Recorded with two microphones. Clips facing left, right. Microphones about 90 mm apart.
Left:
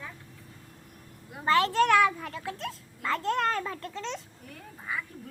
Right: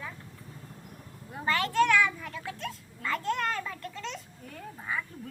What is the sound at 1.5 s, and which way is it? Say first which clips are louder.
Speech: left 3 dB; 35° left (ahead or behind).